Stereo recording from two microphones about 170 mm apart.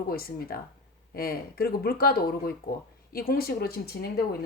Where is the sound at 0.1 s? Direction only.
60° left (ahead or behind).